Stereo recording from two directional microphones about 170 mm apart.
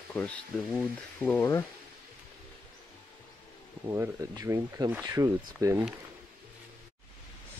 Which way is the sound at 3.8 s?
20° right (ahead or behind).